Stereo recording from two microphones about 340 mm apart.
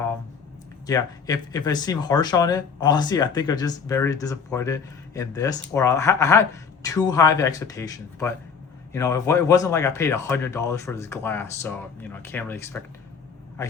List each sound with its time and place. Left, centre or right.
0.9 s speech: centre